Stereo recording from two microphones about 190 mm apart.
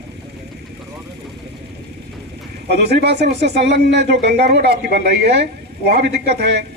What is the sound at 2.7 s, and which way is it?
Speech, 60° right (ahead or behind).